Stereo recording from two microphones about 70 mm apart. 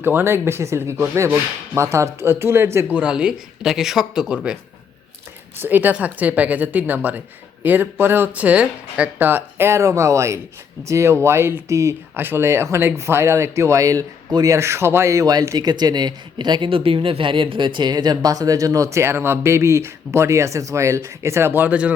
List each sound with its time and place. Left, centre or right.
0.0 s speech: right
2.8 s speech: centre
5.6 s speech: right
9.1 s speech: right
12.1 s speech: right
15.5 s speech: right
17.7 s speech: right